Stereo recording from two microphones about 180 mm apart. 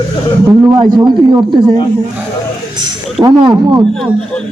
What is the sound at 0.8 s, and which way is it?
Speech, 25° right (ahead or behind).